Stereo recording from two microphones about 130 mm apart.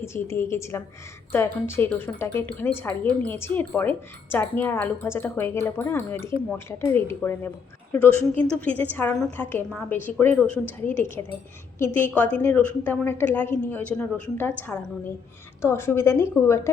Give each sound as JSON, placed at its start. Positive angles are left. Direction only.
{"t": 0.0, "sound": "a woman's voice", "side_deg": 20}
{"t": 15.6, "sound": "a woman's voice", "side_deg": 20}